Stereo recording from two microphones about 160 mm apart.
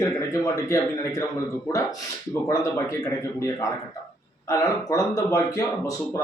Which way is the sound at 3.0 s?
20° left (ahead or behind).